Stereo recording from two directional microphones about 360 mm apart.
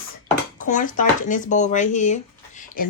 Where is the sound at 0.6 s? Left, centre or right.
Left.